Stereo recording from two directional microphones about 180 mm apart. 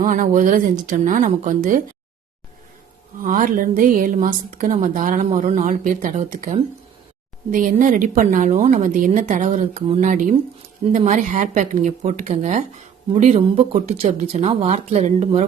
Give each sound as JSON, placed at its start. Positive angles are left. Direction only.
{"t": 0.0, "sound": "a woman's voice", "side_deg": -45}
{"t": 3.2, "sound": "a woman's voice", "side_deg": -45}